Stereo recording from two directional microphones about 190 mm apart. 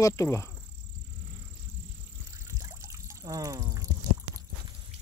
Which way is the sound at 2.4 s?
15° right (ahead or behind).